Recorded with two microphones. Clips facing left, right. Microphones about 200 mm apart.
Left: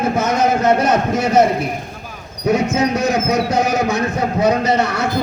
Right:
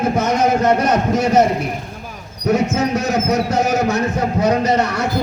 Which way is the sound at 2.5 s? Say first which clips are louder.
Even; 15° left (ahead or behind).